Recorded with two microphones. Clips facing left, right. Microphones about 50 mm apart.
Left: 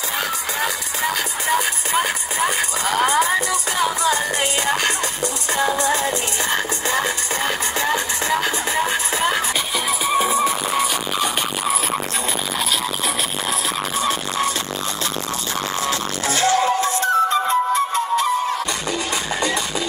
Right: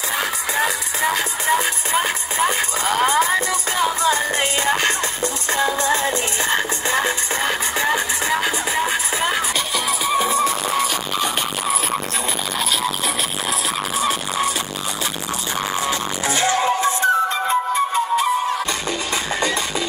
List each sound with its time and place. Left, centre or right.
4.0 s music: right
6.5 s music: right
10.0 s music: centre
13.5 s music: centre
15.9 s music: right
17.7 s flute: centre